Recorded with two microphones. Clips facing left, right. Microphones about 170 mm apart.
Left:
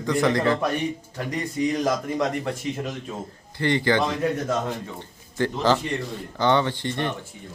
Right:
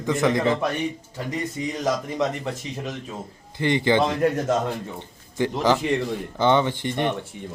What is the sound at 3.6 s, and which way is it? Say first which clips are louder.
Speech: right 1 dB; 20° right (ahead or behind).